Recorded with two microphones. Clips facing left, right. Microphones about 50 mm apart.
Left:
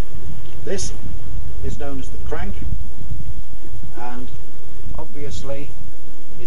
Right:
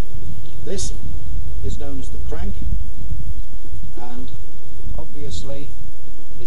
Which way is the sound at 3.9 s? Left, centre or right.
Left.